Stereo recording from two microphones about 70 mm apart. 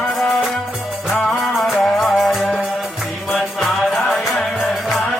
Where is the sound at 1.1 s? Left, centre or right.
Centre.